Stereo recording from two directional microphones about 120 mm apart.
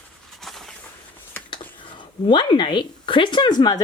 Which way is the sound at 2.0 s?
40° left (ahead or behind).